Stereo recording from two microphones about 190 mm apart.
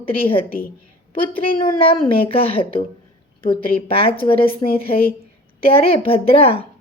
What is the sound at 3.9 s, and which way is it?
A woman's voice, 30° left (ahead or behind).